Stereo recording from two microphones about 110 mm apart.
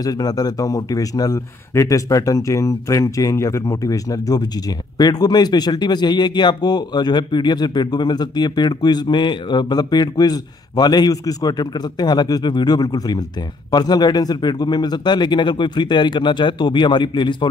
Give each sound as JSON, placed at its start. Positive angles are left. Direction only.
{"t": 0.0, "sound": "a man's voice", "side_deg": 35}